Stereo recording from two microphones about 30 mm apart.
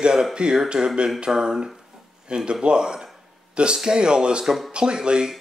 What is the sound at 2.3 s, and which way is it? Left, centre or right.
Speech, right.